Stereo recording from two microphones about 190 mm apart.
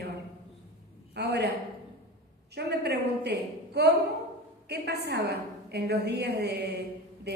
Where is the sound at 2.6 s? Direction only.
60° right (ahead or behind).